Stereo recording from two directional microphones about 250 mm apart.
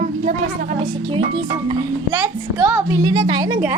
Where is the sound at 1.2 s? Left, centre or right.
Right.